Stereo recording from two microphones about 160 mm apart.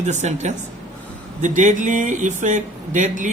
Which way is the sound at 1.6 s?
50° right (ahead or behind).